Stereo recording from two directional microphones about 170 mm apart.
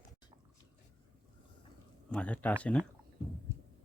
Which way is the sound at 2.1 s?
5° left (ahead or behind).